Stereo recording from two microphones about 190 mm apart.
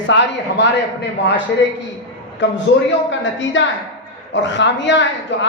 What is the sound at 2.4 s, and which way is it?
A man's voice, 75° left (ahead or behind).